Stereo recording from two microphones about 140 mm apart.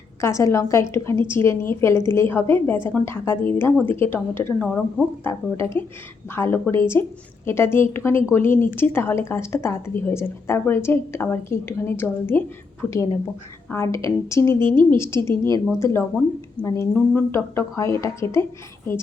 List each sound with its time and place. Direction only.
0.2 s a woman's voice: 20° left (ahead or behind)